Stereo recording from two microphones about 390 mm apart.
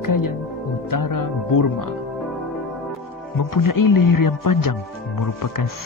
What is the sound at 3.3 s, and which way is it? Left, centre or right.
Speech, left.